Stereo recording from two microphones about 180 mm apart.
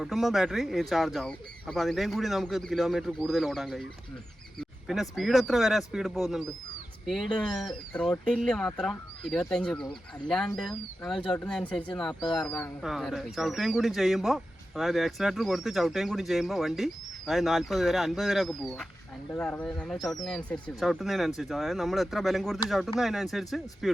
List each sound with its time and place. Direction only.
0.0 s speech: centre (ahead or behind)
4.9 s speech: centre (ahead or behind)